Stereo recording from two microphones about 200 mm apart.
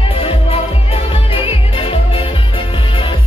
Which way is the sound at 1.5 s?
30° left (ahead or behind).